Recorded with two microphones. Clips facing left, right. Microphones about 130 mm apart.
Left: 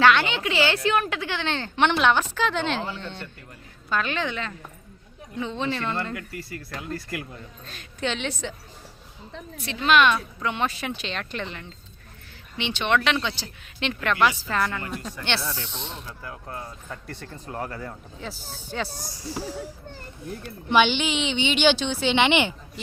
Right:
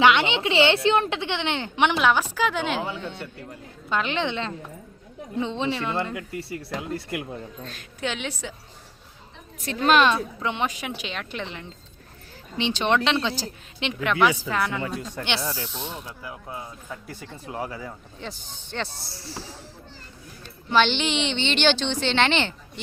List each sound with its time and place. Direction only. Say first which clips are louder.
0.0 s a woman's voice: even; 20° right (ahead or behind)
3.5 s speech: even; 20° right (ahead or behind)
5.7 s a woman's voice: right 1 dB; 15° right (ahead or behind)
7.7 s a woman's voice: left 2 dB; 5° right (ahead or behind)
9.6 s speech: right 1 dB; 40° right (ahead or behind); by 11.6 s 15° right (ahead or behind)
12.5 s speech: right 2 dB; 35° right (ahead or behind)
13.7 s a woman's voice: right 1 dB; 15° right (ahead or behind); by 18.9 s 5° left (ahead or behind)
18.9 s speech: left 5 dB; 45° left (ahead or behind)
19.1 s a woman's voice: left 5 dB; 15° left (ahead or behind)
20.7 s a woman's voice: left 1 dB; 10° left (ahead or behind)